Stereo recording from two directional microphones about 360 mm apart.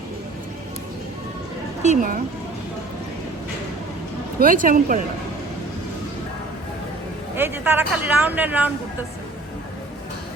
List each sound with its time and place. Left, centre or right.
1.8 s speech: right
4.4 s speech: right
7.3 s speech: centre